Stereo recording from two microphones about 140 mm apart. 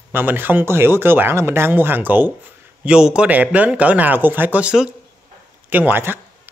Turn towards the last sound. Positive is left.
turn(degrees=-15)  # may be behind; listen again after turning